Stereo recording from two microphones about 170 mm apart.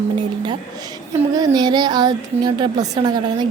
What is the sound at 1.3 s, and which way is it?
A woman's voice, 25° right (ahead or behind).